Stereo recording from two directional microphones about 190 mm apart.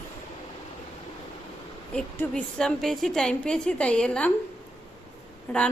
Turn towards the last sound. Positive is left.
turn(degrees=10)  # may be behind; listen again after turning